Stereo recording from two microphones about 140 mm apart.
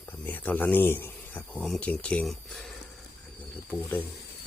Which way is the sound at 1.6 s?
5° left (ahead or behind).